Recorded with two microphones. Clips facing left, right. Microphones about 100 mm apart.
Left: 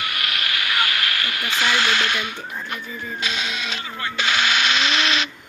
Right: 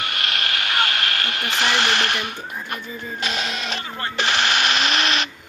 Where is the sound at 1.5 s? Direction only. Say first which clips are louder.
Even; 50° right (ahead or behind).